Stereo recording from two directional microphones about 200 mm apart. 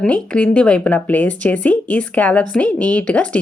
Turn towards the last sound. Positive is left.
turn(degrees=5)  # may be behind; listen again after turning